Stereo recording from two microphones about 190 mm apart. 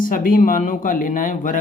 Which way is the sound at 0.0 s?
45° left (ahead or behind).